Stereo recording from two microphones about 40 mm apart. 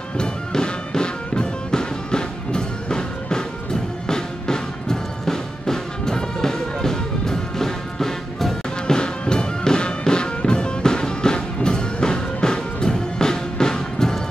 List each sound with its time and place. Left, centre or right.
0.2 s music: centre
8.8 s music: left